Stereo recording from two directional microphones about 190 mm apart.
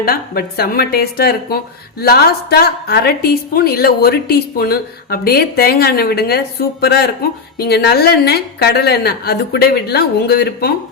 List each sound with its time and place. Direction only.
0.0 s speech: 50° left (ahead or behind)